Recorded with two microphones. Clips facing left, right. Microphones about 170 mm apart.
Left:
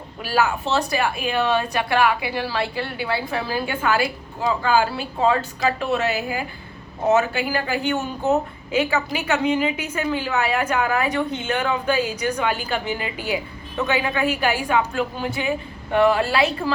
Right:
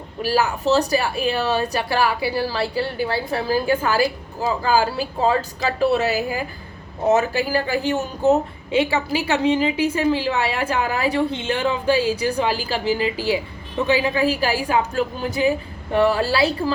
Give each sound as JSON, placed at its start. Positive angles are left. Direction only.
{"t": 0.2, "sound": "a woman's voice", "side_deg": -40}